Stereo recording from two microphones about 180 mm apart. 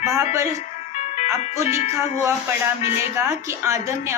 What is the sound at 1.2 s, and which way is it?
Music, 15° right (ahead or behind).